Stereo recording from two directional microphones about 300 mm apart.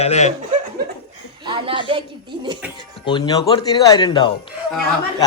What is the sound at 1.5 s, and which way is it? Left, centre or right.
A woman's voice, centre.